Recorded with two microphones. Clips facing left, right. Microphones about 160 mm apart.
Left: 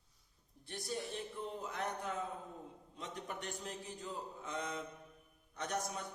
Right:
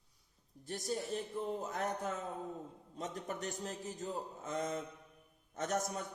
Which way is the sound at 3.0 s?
40° right (ahead or behind).